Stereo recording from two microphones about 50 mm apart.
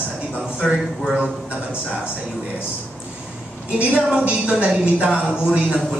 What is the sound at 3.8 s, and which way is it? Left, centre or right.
A woman's voice, right.